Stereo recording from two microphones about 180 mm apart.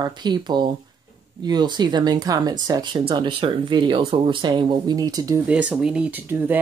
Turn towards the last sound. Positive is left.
turn(degrees=-10)  # may be behind; listen again after turning